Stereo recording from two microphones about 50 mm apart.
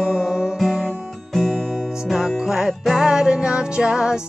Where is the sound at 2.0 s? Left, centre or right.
Centre.